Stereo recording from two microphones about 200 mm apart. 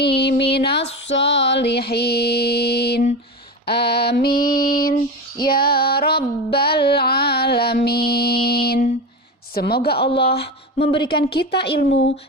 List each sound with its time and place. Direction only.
0.0 s a woman's voice: 55° left (ahead or behind)
1.0 s mantra: 65° left (ahead or behind)
3.7 s female singing: 55° left (ahead or behind)
5.4 s music: 50° left (ahead or behind)
9.6 s a woman's voice: 50° left (ahead or behind)
10.8 s a woman's voice: 25° left (ahead or behind)
11.3 s a woman's voice: 55° left (ahead or behind)